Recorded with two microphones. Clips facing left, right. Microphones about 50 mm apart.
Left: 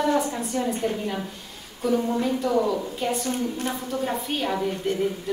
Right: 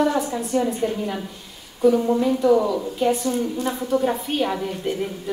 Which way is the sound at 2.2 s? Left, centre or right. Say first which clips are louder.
Right 5 dB; centre.